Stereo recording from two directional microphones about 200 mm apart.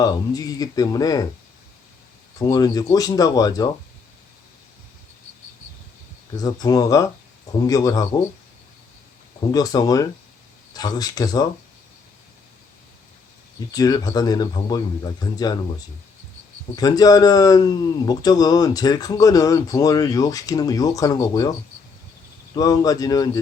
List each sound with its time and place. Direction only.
0.0 s speech: 20° left (ahead or behind)
2.4 s speech: 20° left (ahead or behind)
6.3 s speech: 20° left (ahead or behind)
9.5 s speech: 20° left (ahead or behind)
13.7 s speech: 20° left (ahead or behind)
16.7 s speech: 20° left (ahead or behind)
22.5 s speech: 20° left (ahead or behind)